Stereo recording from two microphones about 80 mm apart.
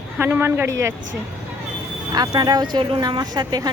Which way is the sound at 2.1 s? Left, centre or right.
Right.